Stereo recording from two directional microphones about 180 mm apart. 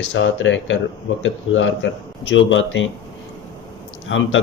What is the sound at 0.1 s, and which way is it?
Speech, 90° left.